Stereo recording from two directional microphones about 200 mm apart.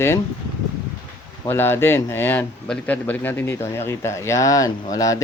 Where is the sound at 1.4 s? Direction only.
10° left (ahead or behind).